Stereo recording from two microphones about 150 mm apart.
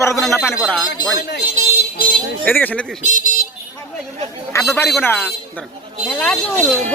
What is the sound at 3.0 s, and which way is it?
Speech, 60° left (ahead or behind).